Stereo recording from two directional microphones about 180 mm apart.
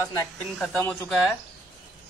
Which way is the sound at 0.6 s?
5° left (ahead or behind).